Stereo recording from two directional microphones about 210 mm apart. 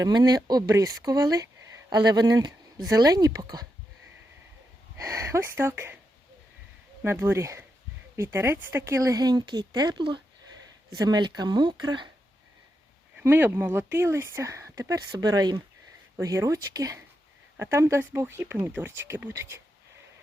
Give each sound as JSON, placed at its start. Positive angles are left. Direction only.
{"t": 0.0, "sound": "speech", "side_deg": -20}
{"t": 4.9, "sound": "speech", "side_deg": -15}
{"t": 7.0, "sound": "speech", "side_deg": -10}
{"t": 13.1, "sound": "speech", "side_deg": -10}